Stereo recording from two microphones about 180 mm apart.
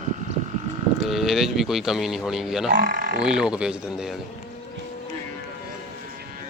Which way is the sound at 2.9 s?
55° right (ahead or behind).